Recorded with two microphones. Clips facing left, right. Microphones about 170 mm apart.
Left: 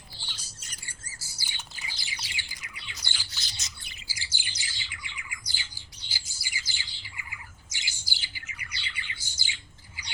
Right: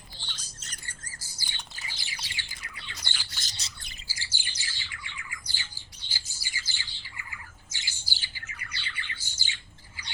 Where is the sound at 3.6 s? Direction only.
30° right (ahead or behind).